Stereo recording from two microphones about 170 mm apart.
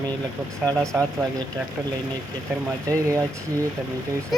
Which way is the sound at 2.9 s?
20° right (ahead or behind).